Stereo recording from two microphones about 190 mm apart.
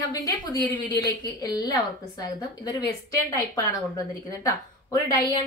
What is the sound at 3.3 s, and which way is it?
A woman's voice, 20° left (ahead or behind).